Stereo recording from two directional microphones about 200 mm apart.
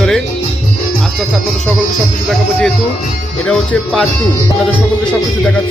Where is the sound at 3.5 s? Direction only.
Centre (ahead or behind).